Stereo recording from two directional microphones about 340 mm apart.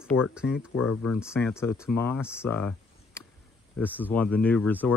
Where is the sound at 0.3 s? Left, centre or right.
Centre.